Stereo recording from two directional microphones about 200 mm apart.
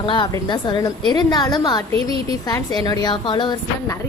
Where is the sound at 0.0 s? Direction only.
25° left (ahead or behind).